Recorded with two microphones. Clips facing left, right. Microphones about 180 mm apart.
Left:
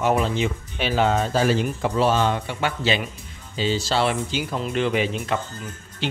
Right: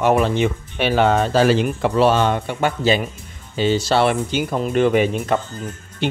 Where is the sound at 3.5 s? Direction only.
60° right (ahead or behind).